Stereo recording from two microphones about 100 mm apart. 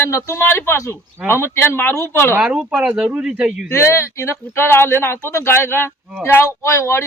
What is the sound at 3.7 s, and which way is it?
Speech, 30° left (ahead or behind).